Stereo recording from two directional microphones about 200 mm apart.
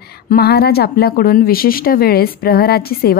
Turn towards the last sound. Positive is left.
turn(degrees=50)  # may be behind; listen again after turning